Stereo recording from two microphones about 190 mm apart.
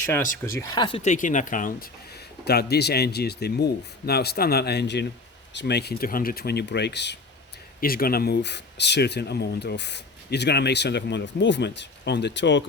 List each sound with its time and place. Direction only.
0.6 s speech: 20° left (ahead or behind)
1.1 s speech: 40° left (ahead or behind)
2.4 s speech: 55° left (ahead or behind)
7.8 s speech: 50° left (ahead or behind); by 12.6 s 70° left (ahead or behind)